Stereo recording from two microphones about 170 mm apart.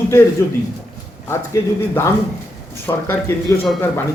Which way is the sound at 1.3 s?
15° left (ahead or behind).